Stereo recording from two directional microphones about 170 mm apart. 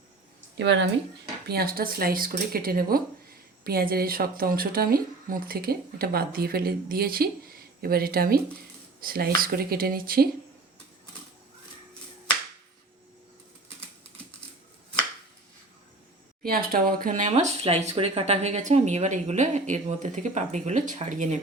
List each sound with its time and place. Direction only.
0.5 s speech: 85° right
1.5 s speech: 65° right (ahead or behind)
16.4 s speech: 60° right (ahead or behind)